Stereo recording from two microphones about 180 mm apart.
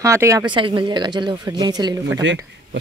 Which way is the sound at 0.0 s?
15° right (ahead or behind).